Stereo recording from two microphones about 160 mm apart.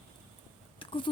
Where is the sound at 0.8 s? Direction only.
30° left (ahead or behind).